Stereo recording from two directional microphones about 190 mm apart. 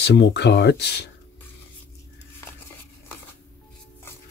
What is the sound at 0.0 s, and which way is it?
Speech, 65° left (ahead or behind).